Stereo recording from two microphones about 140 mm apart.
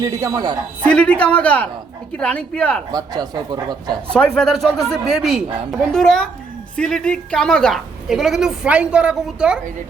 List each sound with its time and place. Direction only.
0.0 s speech: 25° right (ahead or behind)
0.9 s speech: 10° left (ahead or behind)
2.9 s speech: 25° right (ahead or behind)
4.1 s a woman's voice: 5° left (ahead or behind)